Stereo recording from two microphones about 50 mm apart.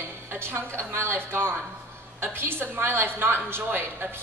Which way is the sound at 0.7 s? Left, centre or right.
Right.